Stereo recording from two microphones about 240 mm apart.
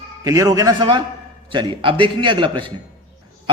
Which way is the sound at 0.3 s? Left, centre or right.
Centre.